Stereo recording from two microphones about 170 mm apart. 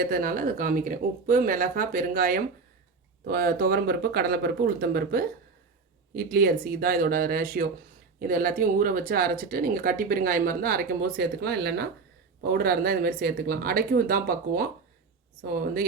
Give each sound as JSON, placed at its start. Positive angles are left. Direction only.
{"t": 0.0, "sound": "speech", "side_deg": -55}